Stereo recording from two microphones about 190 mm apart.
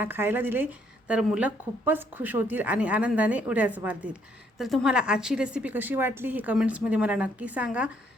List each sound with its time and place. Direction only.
0.0 s a woman's voice: 10° right (ahead or behind)